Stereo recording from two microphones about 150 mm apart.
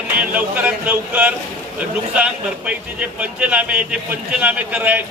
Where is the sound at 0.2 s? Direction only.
10° right (ahead or behind).